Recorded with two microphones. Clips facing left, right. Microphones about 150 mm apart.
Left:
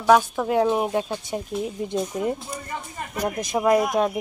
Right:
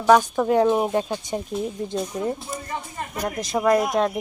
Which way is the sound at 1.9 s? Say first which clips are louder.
Left 1 dB; 15° left (ahead or behind).